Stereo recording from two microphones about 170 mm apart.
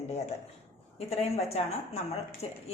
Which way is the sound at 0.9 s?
35° left (ahead or behind).